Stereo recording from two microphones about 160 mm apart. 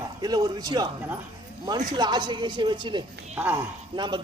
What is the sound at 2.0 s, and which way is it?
A man's voice, 25° right (ahead or behind).